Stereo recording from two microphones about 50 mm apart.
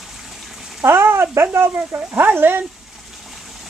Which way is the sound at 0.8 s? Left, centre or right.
Right.